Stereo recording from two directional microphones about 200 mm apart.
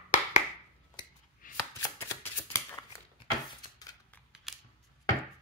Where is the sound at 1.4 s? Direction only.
40° left (ahead or behind).